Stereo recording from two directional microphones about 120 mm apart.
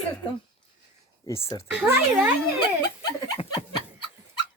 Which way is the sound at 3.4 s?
50° left (ahead or behind).